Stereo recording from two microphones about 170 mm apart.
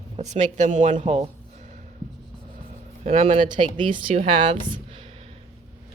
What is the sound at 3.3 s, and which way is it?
Speech, 30° right (ahead or behind).